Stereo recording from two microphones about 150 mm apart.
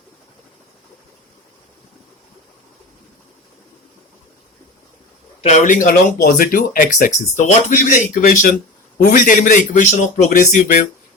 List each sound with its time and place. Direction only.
5.4 s speech: 50° left (ahead or behind)